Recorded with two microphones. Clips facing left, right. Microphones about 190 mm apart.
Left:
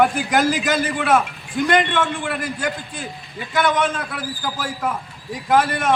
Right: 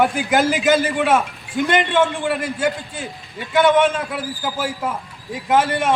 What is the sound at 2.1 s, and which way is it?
A man's voice, 20° right (ahead or behind).